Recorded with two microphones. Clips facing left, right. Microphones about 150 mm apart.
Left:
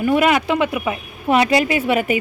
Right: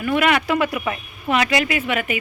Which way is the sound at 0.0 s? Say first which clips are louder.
Left 4 dB; 30° left (ahead or behind).